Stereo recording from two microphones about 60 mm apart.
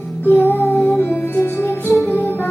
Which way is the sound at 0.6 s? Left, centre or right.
Centre.